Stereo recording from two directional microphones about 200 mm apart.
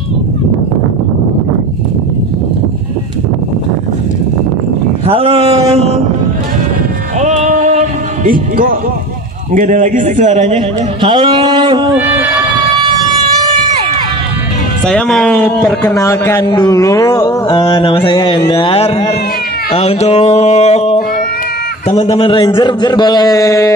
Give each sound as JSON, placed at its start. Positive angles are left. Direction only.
{"t": 5.0, "sound": "speech", "side_deg": -30}
{"t": 5.7, "sound": "train", "side_deg": -30}
{"t": 7.2, "sound": "a sound", "side_deg": -35}
{"t": 9.5, "sound": "a man's voice", "side_deg": -40}
{"t": 12.7, "sound": "siren", "side_deg": -20}
{"t": 14.9, "sound": "a man's voice", "side_deg": 5}
{"t": 19.7, "sound": "music", "side_deg": 30}
{"t": 21.9, "sound": "a man's voice", "side_deg": 30}